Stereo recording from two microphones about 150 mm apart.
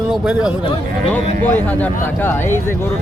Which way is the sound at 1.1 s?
10° left (ahead or behind).